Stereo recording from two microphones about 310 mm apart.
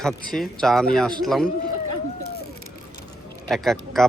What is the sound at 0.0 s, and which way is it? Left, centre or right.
Speech, centre.